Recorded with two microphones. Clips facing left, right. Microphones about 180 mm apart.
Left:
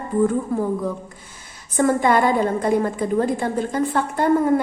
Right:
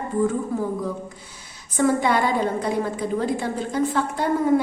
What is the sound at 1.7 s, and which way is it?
A woman's voice, 50° left (ahead or behind).